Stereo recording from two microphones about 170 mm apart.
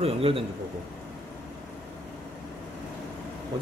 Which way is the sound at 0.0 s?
35° right (ahead or behind).